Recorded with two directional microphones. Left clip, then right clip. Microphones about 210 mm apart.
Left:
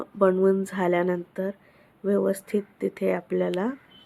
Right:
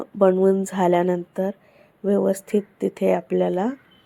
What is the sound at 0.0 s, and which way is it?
A woman's voice, 10° right (ahead or behind).